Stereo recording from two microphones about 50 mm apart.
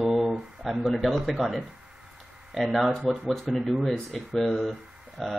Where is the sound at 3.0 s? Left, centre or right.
Centre.